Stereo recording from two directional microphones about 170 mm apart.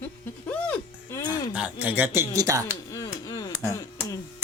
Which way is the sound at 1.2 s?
25° left (ahead or behind).